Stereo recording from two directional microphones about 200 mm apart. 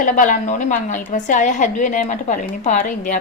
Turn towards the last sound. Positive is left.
turn(degrees=35)  # may be behind; listen again after turning